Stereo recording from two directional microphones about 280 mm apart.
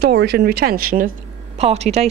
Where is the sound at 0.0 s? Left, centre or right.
Right.